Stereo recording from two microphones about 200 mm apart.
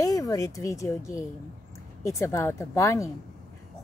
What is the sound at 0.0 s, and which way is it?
A woman's voice, 15° left (ahead or behind).